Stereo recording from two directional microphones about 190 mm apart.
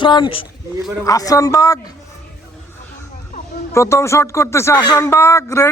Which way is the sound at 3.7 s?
15° left (ahead or behind).